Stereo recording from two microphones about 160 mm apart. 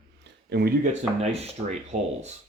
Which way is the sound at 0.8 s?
45° right (ahead or behind).